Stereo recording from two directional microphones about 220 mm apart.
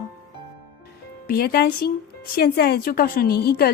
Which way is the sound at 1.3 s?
45° left (ahead or behind).